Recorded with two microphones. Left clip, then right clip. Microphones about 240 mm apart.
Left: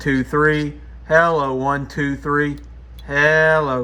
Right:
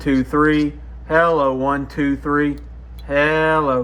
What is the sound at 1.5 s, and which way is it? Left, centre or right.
Speech, left.